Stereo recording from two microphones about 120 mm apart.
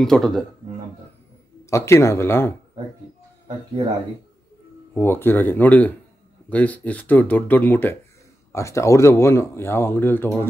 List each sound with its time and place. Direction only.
0.0 s speech: 5° left (ahead or behind)
1.7 s speech: 25° left (ahead or behind)
4.9 s speech: 20° left (ahead or behind)